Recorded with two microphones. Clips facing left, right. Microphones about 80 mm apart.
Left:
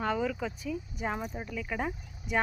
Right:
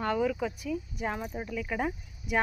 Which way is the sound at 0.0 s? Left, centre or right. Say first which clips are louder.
Right 2 dB; centre.